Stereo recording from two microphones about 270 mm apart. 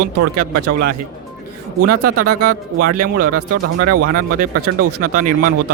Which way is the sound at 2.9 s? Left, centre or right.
Right.